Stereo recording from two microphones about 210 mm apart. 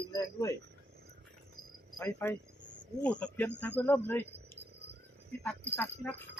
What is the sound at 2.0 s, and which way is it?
Speech, 10° left (ahead or behind).